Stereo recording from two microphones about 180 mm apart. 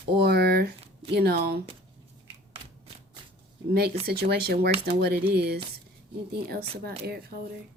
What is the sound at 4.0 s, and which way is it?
Speech, 60° right (ahead or behind).